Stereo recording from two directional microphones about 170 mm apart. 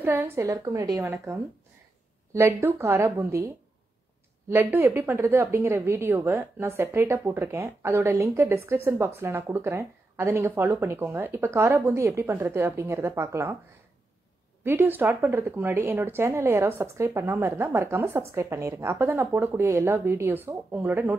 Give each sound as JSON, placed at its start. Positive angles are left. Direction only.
{"t": 0.0, "sound": "a woman's voice", "side_deg": -15}
{"t": 14.6, "sound": "a woman's voice", "side_deg": -10}